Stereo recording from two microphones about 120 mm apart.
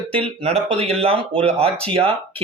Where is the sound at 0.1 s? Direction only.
50° right (ahead or behind).